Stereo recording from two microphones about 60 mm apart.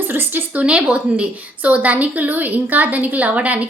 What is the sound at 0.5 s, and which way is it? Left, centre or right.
A woman's voice, centre.